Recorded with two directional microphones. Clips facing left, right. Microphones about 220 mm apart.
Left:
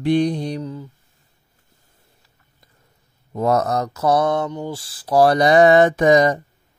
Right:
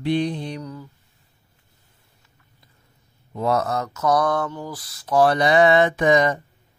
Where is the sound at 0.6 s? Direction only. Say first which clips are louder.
Left 5 dB; 25° left (ahead or behind).